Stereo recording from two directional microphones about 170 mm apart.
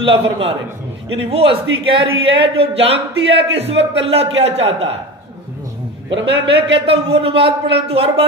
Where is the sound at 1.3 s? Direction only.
35° right (ahead or behind).